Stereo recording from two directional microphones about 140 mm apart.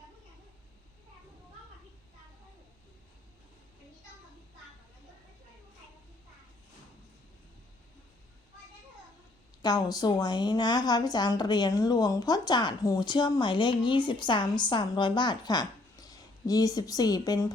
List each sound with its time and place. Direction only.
9.6 s speech: 30° left (ahead or behind)